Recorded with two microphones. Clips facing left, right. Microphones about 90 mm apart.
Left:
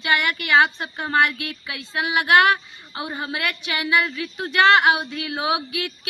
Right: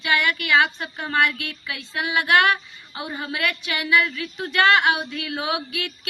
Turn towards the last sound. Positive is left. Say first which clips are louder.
# left 2 dB
turn(degrees=25)  # may be behind; listen again after turning